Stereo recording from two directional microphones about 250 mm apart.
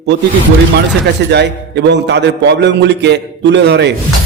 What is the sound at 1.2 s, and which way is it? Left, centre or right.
A man's voice, right.